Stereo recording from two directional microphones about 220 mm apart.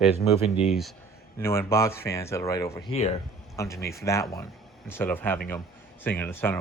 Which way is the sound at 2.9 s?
30° left (ahead or behind).